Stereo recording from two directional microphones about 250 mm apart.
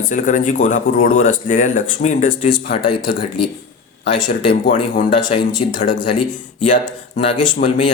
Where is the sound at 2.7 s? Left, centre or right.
Centre.